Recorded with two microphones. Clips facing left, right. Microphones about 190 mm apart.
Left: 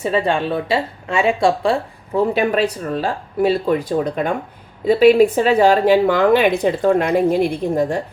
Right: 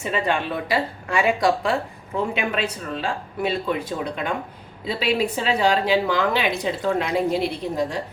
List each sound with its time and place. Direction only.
0.0 s speech: 30° left (ahead or behind); by 8.0 s 50° left (ahead or behind)